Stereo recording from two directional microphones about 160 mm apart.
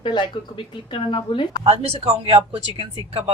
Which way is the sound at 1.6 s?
40° right (ahead or behind).